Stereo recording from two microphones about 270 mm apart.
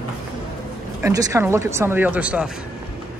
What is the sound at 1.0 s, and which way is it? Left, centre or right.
Speech, centre.